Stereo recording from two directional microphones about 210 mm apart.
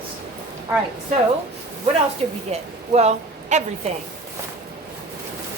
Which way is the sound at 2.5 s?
30° right (ahead or behind).